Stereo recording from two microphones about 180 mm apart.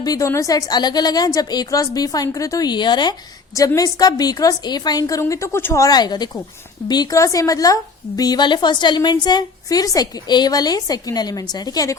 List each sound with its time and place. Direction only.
0.0 s a woman's voice: 20° left (ahead or behind)